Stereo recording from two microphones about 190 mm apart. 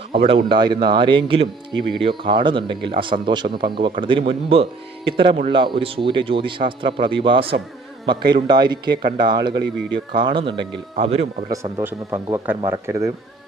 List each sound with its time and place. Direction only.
0.4 s a man's voice: 25° right (ahead or behind)
11.5 s speech: 15° right (ahead or behind)